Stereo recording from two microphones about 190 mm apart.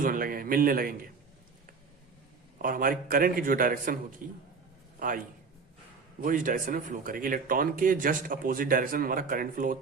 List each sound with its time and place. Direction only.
0.0 s speech: 50° right (ahead or behind)
2.6 s a man's voice: 50° right (ahead or behind)
6.2 s speech: 45° right (ahead or behind)